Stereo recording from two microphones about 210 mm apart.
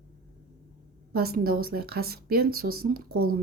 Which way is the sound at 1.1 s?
45° right (ahead or behind).